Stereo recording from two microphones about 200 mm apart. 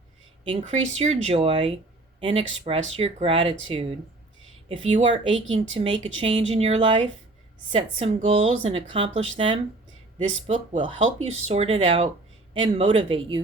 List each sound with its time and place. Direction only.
0.5 s a woman's voice: 35° right (ahead or behind)
10.4 s a woman's voice: 35° right (ahead or behind)